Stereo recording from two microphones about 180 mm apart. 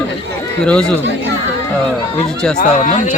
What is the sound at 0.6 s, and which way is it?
Speech, 5° left (ahead or behind).